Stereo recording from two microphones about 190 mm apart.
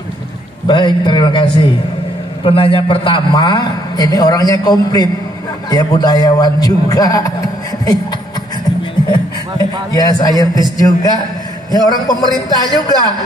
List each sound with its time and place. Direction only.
0.7 s a man's voice: 25° left (ahead or behind)
9.0 s a man's voice: 20° left (ahead or behind)